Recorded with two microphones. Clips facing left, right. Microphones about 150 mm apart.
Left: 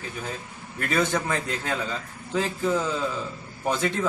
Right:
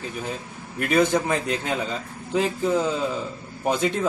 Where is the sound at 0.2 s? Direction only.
20° right (ahead or behind).